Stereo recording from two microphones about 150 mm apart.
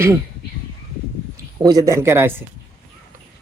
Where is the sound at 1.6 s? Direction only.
20° right (ahead or behind).